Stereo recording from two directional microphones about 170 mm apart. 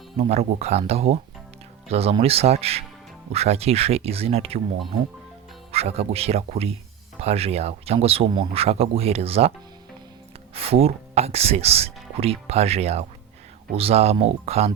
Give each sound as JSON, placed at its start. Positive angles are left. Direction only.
{"t": 0.2, "sound": "speech", "side_deg": -40}
{"t": 5.7, "sound": "speech", "side_deg": -35}
{"t": 10.5, "sound": "speech", "side_deg": -35}